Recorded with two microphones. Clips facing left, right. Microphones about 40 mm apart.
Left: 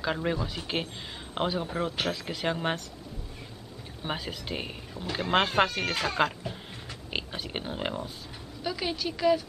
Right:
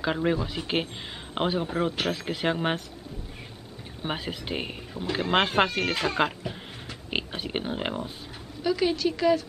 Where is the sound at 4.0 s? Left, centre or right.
Centre.